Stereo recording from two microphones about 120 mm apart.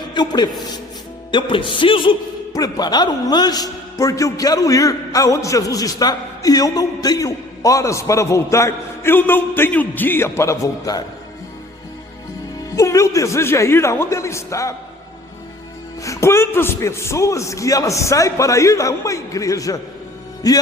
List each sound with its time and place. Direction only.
0.1 s a man's voice: 35° left (ahead or behind)
1.3 s music: 45° left (ahead or behind)
2.5 s a man's voice: 35° left (ahead or behind)
12.7 s a man's voice: 25° left (ahead or behind)
16.0 s a man's voice: 20° left (ahead or behind)